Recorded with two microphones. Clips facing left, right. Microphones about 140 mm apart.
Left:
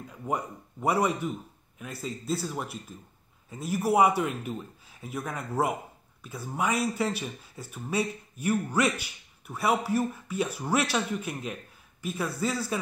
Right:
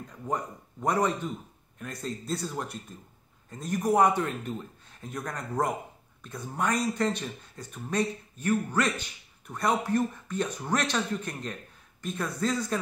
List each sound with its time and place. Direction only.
0.0 s speech: 10° left (ahead or behind)